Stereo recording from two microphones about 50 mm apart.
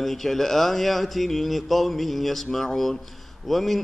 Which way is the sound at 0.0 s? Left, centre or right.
Centre.